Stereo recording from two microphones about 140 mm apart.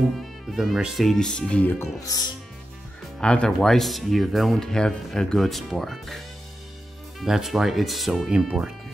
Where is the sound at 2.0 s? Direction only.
25° left (ahead or behind).